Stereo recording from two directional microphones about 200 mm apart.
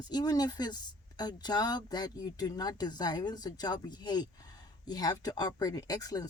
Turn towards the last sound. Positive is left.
turn(degrees=20)  # may be behind; listen again after turning